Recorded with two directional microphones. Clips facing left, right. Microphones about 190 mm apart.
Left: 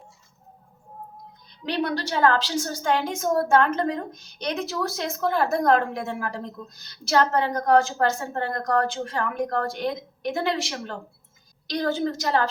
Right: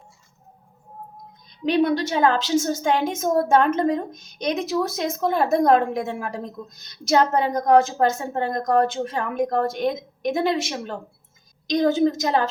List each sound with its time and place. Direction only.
1.6 s a woman's voice: 15° right (ahead or behind)